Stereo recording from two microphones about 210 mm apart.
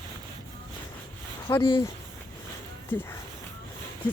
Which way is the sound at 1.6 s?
25° left (ahead or behind).